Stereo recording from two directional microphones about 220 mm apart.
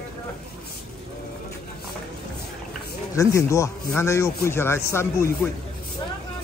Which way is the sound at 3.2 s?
15° left (ahead or behind).